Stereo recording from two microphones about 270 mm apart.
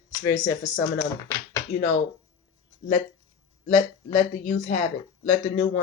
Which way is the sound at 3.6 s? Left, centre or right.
Left.